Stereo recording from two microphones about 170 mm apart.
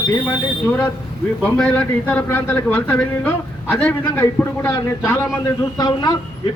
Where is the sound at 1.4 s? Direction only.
5° left (ahead or behind).